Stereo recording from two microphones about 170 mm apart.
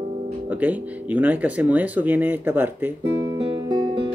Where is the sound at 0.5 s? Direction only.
10° right (ahead or behind).